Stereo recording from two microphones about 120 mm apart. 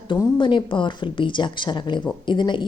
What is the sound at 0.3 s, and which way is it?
A woman's voice, 45° left (ahead or behind).